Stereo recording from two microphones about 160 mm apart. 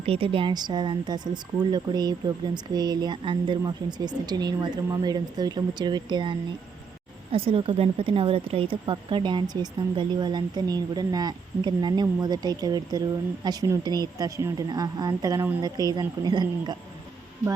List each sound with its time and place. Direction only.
0.0 s speech: 35° right (ahead or behind)
7.3 s speech: 35° right (ahead or behind)